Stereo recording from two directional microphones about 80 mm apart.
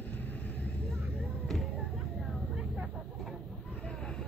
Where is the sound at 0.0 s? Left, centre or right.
Left.